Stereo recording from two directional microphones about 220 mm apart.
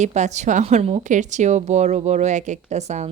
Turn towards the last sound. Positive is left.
turn(degrees=-30)  # may be behind; listen again after turning